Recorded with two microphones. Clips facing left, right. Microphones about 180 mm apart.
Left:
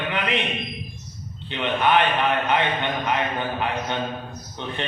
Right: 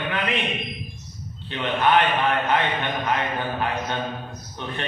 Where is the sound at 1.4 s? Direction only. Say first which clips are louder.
Even; 20° left (ahead or behind).